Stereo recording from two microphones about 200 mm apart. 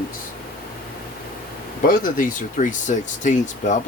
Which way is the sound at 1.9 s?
45° left (ahead or behind).